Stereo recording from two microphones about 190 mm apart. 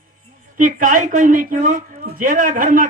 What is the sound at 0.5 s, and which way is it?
Speech, 45° right (ahead or behind).